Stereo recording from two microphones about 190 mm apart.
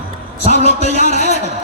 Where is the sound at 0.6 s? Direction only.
35° left (ahead or behind).